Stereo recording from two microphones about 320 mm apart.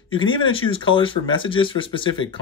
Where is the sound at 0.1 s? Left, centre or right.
Centre.